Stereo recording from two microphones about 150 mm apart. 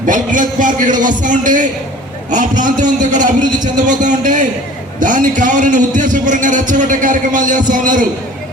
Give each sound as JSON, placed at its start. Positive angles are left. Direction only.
{"t": 0.0, "sound": "a man's voice", "side_deg": -60}